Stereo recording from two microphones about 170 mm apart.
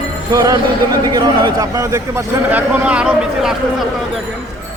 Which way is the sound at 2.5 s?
5° right (ahead or behind).